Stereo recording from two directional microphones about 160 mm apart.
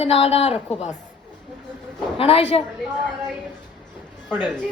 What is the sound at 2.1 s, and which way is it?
Speech, 35° left (ahead or behind).